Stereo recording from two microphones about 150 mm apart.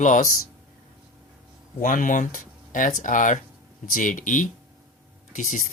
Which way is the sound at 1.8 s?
65° left (ahead or behind).